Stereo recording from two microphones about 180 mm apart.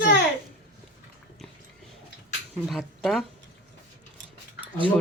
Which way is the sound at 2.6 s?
Centre (ahead or behind).